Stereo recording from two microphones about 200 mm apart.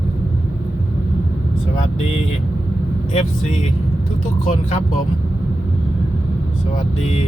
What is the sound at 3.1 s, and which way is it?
Speech, 30° left (ahead or behind).